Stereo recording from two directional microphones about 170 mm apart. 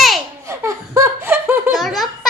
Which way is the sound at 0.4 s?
15° right (ahead or behind).